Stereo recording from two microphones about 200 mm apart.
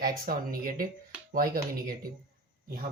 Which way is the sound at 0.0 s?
45° right (ahead or behind).